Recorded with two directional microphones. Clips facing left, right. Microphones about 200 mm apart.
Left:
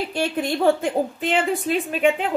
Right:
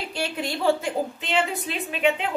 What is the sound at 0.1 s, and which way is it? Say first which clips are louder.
A woman's voice: left 5 dB; 50° left (ahead or behind).